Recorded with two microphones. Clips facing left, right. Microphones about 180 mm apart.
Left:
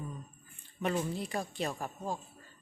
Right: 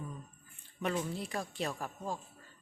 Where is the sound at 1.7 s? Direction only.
15° left (ahead or behind).